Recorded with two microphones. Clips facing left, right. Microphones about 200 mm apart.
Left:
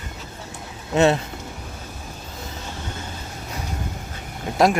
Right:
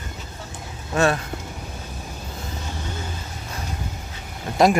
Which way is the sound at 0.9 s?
20° left (ahead or behind).